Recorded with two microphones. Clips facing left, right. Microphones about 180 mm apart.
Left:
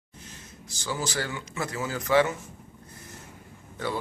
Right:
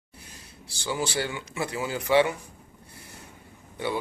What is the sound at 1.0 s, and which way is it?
Speech, 30° right (ahead or behind).